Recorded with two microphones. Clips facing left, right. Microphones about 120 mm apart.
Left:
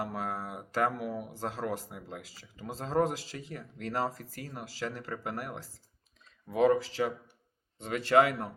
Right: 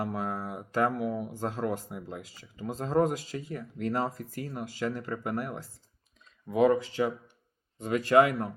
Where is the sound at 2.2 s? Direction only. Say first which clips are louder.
Right 5 dB; 40° left (ahead or behind).